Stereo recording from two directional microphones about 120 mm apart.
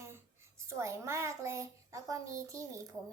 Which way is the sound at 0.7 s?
25° right (ahead or behind).